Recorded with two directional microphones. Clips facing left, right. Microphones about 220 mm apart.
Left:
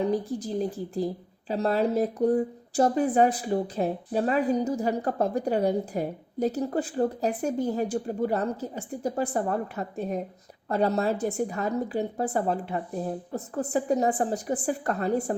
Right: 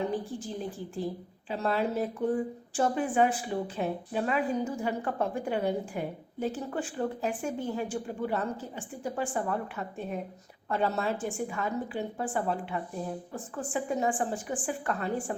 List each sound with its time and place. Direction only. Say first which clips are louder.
0.0 s speech: left 5 dB; 40° left (ahead or behind)